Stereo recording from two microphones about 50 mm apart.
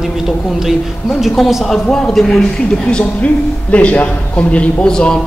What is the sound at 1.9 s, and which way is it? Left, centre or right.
Speech, centre.